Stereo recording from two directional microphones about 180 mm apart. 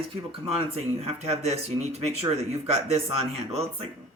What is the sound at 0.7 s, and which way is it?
Speech, 35° right (ahead or behind).